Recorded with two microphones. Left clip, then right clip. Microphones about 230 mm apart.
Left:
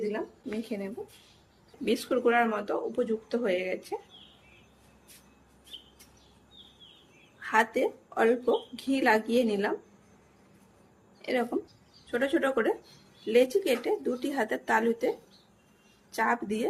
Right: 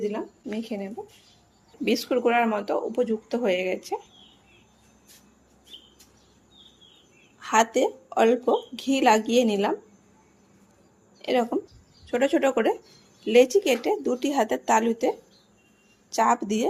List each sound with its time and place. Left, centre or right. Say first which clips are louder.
0.0 s a woman's voice: right 3 dB; right
7.3 s speech: right 5 dB; right
11.2 s speech: right 5 dB; right
16.1 s speech: right 6 dB; right